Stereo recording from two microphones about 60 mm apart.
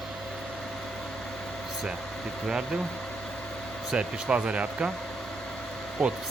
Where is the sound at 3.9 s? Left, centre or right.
Centre.